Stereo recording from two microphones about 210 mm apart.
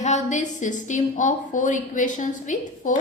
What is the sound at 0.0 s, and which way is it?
A woman's voice, 35° left (ahead or behind).